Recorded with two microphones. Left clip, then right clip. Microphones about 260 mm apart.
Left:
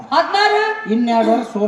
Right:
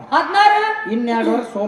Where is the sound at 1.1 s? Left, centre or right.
Left.